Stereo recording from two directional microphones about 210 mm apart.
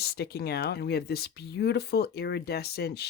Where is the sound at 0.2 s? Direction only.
50° left (ahead or behind).